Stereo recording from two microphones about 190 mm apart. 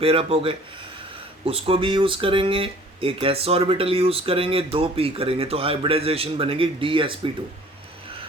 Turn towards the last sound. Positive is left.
turn(degrees=-25)  # may be behind; listen again after turning